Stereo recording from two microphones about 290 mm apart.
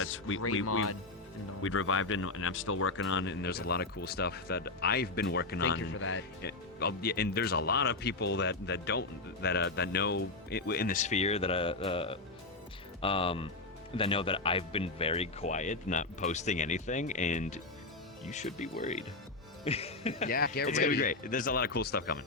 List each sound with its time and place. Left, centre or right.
0.0 s speech: left